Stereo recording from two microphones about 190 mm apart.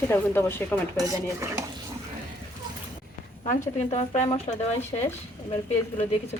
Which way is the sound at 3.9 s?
30° left (ahead or behind).